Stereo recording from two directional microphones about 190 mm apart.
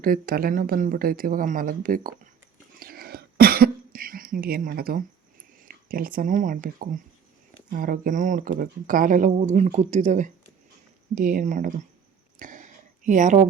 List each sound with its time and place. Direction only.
0.0 s speech: 50° right (ahead or behind)
2.7 s cough: 50° right (ahead or behind)
5.6 s speech: 50° right (ahead or behind)
12.4 s a sound: 40° right (ahead or behind)